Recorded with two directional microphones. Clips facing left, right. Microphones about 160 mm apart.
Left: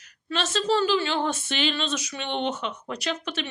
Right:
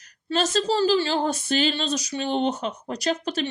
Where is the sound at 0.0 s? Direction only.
40° right (ahead or behind).